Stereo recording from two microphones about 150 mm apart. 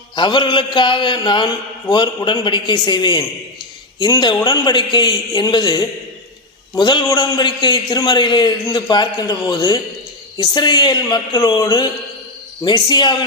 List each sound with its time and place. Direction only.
0.2 s a man's voice: 30° left (ahead or behind)